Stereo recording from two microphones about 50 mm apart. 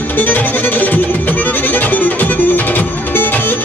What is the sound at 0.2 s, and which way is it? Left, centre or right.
Music, left.